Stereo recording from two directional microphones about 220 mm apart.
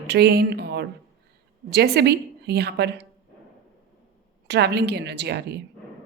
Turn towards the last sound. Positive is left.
turn(degrees=-50)  # may be behind; listen again after turning